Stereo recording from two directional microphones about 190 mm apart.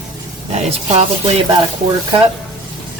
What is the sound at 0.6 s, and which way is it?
Speech, 35° right (ahead or behind).